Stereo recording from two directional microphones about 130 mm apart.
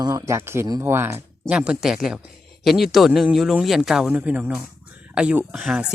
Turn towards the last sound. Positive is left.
turn(degrees=-5)  # may be behind; listen again after turning